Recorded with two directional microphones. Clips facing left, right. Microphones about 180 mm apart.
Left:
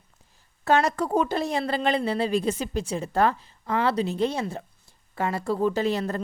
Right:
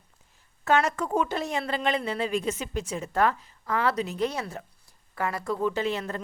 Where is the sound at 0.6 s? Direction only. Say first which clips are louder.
Left 2 dB; 35° left (ahead or behind).